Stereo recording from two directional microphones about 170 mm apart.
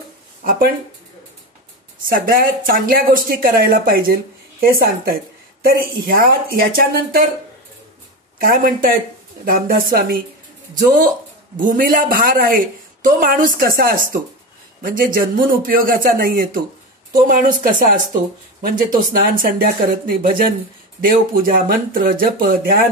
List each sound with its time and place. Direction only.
0.4 s speech: 55° right (ahead or behind)
2.0 s speech: 55° right (ahead or behind)
8.4 s a woman's voice: 55° right (ahead or behind)